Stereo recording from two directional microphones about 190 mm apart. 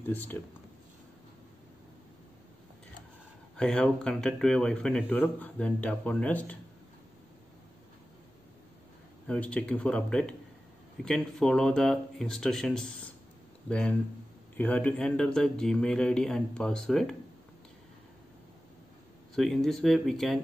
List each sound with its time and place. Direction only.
0.1 s speech: 10° left (ahead or behind)
3.5 s speech: 5° left (ahead or behind)
9.3 s speech: 5° left (ahead or behind)
19.3 s speech: centre (ahead or behind)